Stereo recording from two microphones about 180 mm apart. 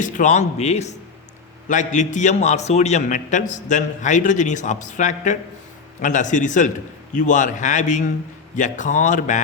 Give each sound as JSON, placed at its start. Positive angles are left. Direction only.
{"t": 0.0, "sound": "a man's voice", "side_deg": 45}